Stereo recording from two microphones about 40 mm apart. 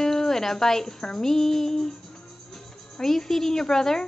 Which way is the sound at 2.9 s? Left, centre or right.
Centre.